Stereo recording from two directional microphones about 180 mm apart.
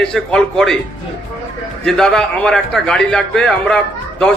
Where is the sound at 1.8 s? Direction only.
5° left (ahead or behind).